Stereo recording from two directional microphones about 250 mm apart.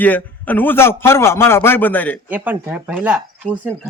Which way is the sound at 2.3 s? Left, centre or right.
Centre.